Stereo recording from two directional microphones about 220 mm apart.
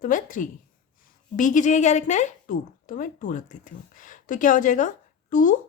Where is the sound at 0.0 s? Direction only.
35° left (ahead or behind).